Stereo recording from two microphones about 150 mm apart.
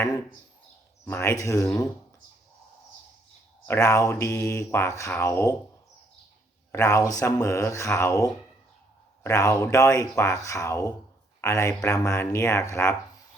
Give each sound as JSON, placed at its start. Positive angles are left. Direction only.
{"t": 1.0, "sound": "mantra", "side_deg": 15}
{"t": 3.7, "sound": "mantra", "side_deg": 20}
{"t": 6.7, "sound": "mantra", "side_deg": 20}
{"t": 11.3, "sound": "a man's voice", "side_deg": 20}
{"t": 11.9, "sound": "mantra", "side_deg": 20}